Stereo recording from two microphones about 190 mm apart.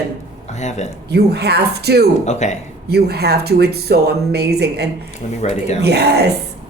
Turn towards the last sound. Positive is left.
turn(degrees=-60)  # may be behind; listen again after turning